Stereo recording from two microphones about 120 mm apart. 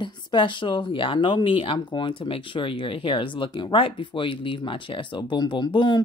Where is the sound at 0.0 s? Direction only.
40° left (ahead or behind).